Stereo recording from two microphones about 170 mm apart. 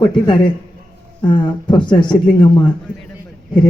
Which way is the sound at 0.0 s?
25° left (ahead or behind).